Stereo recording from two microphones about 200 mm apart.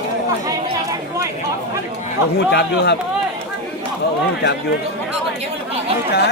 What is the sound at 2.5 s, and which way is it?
Speech, 55° left (ahead or behind).